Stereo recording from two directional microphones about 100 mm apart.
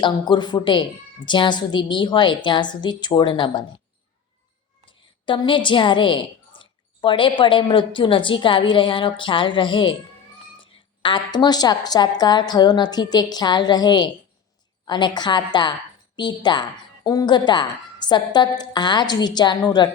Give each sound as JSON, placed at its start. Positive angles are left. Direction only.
{"t": 0.0, "sound": "a woman's voice", "side_deg": 50}
{"t": 4.9, "sound": "a woman's voice", "side_deg": 55}